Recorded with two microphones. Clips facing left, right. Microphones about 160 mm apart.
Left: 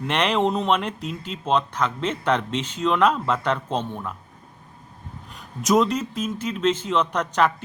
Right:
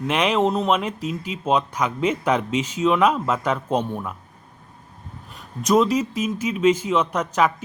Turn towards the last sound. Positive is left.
turn(degrees=-5)  # may be behind; listen again after turning